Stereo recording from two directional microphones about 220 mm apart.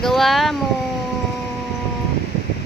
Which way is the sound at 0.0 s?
Centre (ahead or behind).